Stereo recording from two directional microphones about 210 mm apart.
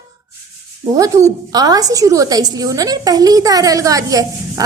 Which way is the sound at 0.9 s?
15° right (ahead or behind).